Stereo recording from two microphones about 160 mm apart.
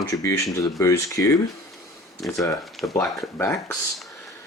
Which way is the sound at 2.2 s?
Centre (ahead or behind).